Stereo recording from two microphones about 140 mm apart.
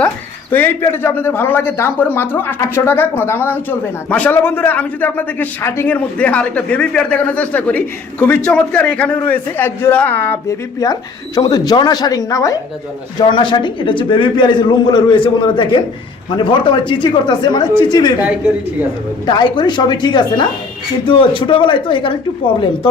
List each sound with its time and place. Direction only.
0.5 s speech: 15° left (ahead or behind)
10.8 s speech: 25° left (ahead or behind)
13.1 s a man's voice: 35° left (ahead or behind)
19.2 s a man's voice: 30° left (ahead or behind)